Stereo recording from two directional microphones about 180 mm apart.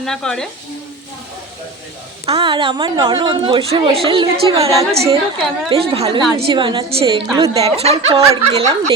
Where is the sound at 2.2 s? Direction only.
30° right (ahead or behind).